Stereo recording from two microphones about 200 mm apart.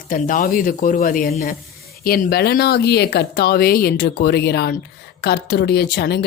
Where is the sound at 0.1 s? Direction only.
40° left (ahead or behind).